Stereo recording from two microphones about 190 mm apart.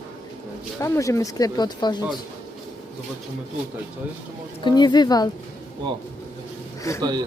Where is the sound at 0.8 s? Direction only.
15° left (ahead or behind).